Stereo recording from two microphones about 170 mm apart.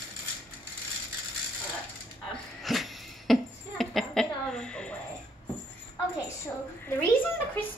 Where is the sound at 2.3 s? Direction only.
Centre (ahead or behind).